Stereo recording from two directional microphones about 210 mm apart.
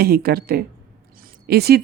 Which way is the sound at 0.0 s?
45° right (ahead or behind).